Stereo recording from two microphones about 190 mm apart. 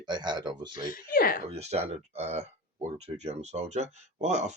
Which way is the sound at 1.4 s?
35° right (ahead or behind).